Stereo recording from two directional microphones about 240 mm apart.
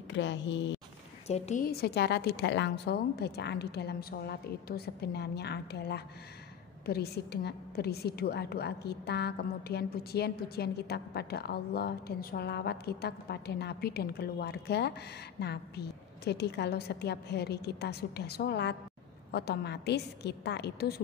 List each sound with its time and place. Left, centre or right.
0.1 s a woman's voice: left
1.2 s a woman's voice: left